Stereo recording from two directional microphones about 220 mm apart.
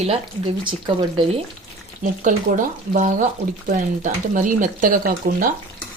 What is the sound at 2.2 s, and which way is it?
Speech, 35° right (ahead or behind).